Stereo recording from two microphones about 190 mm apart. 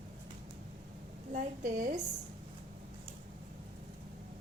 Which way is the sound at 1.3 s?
40° right (ahead or behind).